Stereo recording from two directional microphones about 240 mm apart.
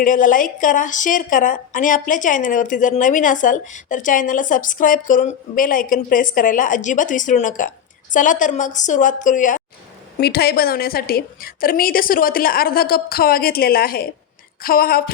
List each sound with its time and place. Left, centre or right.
0.0 s a woman's voice: left